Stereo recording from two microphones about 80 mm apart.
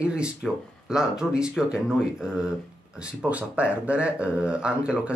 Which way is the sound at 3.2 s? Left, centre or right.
Centre.